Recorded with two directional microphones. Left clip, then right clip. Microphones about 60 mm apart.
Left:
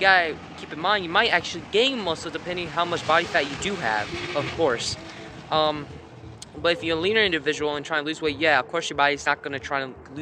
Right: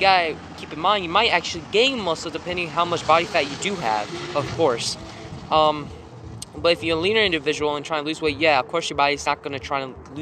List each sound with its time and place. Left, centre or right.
0.0 s speech: left
0.7 s speech: left